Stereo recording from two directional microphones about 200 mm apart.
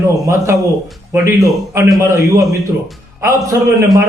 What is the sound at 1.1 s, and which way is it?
Speech, 15° right (ahead or behind).